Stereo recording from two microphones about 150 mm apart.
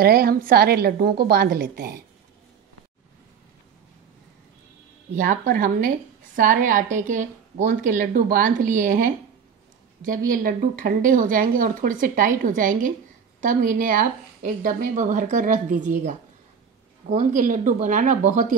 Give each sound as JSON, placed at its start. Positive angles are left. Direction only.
{"t": 0.0, "sound": "a woman's voice", "side_deg": -90}
{"t": 5.1, "sound": "a woman's voice", "side_deg": -55}
{"t": 5.4, "sound": "a woman's voice", "side_deg": -70}